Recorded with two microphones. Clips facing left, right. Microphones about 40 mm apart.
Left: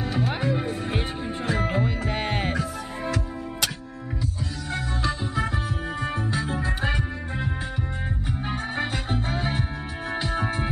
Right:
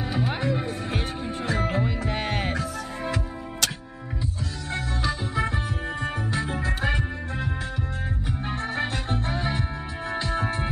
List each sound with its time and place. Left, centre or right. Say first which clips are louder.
0.1 s music: even; centre
4.7 s music: even; centre
6.6 s music: even; centre
8.5 s music: even; centre